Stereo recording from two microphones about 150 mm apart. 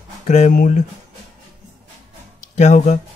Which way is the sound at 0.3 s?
60° left (ahead or behind).